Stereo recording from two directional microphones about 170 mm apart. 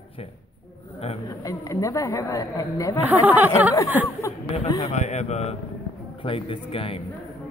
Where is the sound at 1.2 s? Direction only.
20° left (ahead or behind).